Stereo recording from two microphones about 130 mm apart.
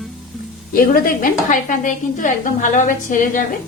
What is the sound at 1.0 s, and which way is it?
A woman's voice, 90° left.